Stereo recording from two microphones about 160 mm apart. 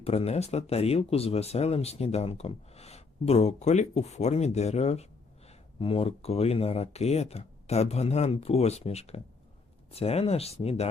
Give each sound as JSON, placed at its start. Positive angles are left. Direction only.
{"t": 0.0, "sound": "speech", "side_deg": 40}